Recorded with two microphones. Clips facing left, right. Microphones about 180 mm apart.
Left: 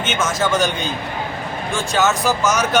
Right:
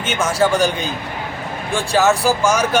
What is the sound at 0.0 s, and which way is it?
Speech, 35° right (ahead or behind).